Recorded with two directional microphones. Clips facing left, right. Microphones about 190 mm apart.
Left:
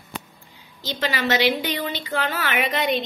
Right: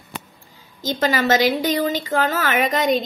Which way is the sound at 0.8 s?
45° right (ahead or behind).